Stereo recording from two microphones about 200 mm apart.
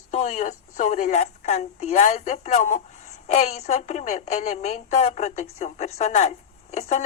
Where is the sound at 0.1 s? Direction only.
35° left (ahead or behind).